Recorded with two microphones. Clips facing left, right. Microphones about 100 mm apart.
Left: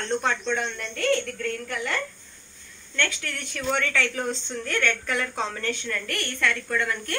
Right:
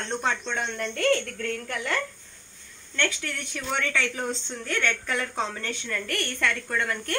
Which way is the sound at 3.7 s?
20° right (ahead or behind).